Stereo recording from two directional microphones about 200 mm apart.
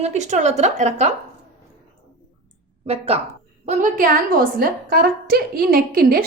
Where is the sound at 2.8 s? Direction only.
30° right (ahead or behind).